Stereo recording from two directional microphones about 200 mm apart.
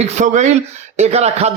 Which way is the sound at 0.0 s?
35° right (ahead or behind).